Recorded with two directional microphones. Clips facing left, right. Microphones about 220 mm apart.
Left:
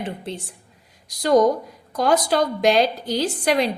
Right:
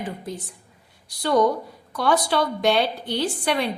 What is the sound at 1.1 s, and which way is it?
Speech, 40° left (ahead or behind).